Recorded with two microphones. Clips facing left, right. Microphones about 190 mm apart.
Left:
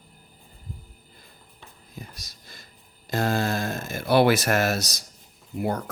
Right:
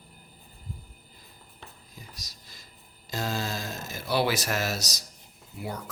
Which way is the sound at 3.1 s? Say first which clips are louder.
Left 7 dB; 55° left (ahead or behind).